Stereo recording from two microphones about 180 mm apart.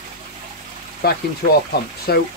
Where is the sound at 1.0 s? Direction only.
60° left (ahead or behind).